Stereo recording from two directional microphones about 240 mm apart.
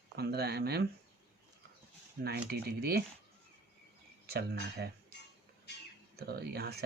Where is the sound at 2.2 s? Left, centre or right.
Right.